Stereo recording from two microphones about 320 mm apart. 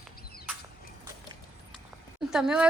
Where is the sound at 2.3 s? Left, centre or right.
Centre.